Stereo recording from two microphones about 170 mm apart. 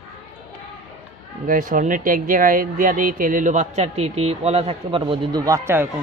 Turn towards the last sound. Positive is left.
turn(degrees=-15)  # may be behind; listen again after turning